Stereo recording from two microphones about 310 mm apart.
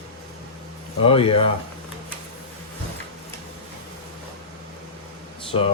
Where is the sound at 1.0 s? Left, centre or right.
Centre.